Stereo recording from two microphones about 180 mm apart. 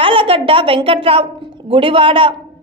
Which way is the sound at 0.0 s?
30° right (ahead or behind).